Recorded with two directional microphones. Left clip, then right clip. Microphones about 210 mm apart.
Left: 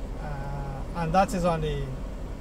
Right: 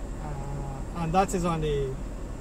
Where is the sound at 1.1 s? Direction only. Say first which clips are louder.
Left 2 dB; 10° left (ahead or behind).